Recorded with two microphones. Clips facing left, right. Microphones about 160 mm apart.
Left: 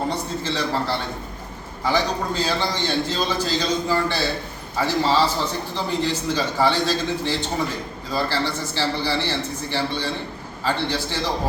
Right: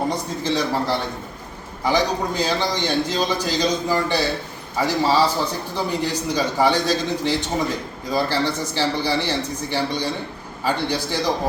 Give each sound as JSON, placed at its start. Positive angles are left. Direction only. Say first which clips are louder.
{"t": 0.1, "sound": "a man's voice", "louder": "right 3 dB", "side_deg": -15}